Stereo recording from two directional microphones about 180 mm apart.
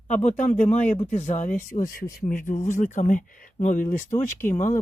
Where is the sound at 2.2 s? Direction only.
50° left (ahead or behind).